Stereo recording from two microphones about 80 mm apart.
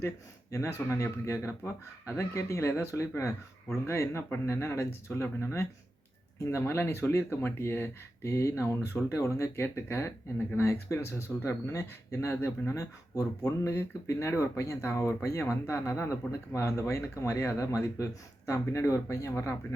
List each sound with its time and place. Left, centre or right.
0.5 s speech: left